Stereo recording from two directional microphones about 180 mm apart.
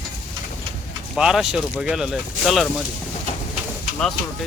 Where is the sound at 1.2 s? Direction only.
5° right (ahead or behind).